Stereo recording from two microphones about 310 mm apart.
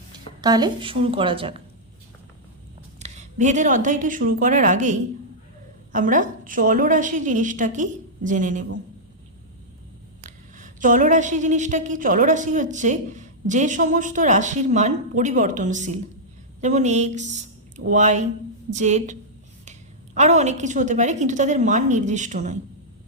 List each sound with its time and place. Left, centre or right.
0.4 s a woman's voice: centre
3.0 s a woman's voice: right
10.2 s a woman's voice: right
20.1 s a woman's voice: right